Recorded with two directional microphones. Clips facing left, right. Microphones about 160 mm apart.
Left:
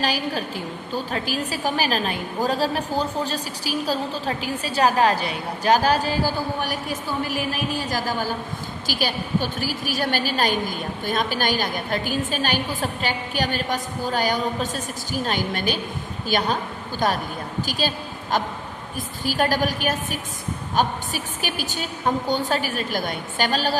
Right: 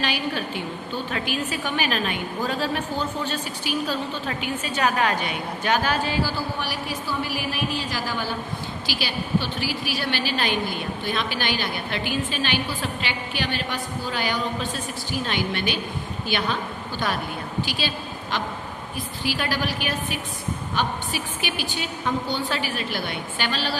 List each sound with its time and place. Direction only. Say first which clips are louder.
0.0 s a woman's voice: left 2 dB; 40° left (ahead or behind)